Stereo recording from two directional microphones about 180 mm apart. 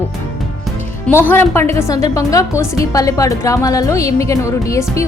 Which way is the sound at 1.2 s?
10° left (ahead or behind).